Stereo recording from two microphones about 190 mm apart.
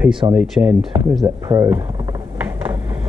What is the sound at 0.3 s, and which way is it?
Speech, 5° right (ahead or behind).